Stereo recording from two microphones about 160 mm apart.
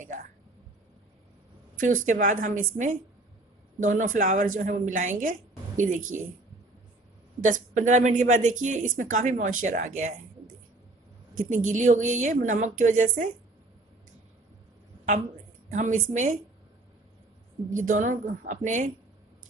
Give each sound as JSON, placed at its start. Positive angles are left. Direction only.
{"t": 1.8, "sound": "a woman's voice", "side_deg": -55}
{"t": 7.4, "sound": "a woman's voice", "side_deg": -50}
{"t": 11.3, "sound": "a woman's voice", "side_deg": -50}
{"t": 15.7, "sound": "a woman's voice", "side_deg": -50}
{"t": 17.7, "sound": "a woman's voice", "side_deg": -55}